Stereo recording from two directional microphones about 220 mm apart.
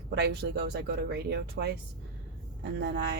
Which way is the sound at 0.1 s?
50° right (ahead or behind).